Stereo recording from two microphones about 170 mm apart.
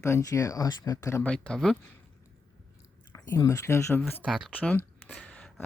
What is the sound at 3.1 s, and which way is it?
A woman's voice, 20° left (ahead or behind).